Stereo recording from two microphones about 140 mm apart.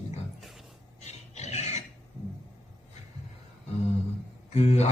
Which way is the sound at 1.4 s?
50° left (ahead or behind).